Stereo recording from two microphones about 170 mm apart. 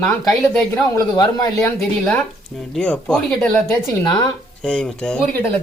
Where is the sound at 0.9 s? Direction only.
25° left (ahead or behind).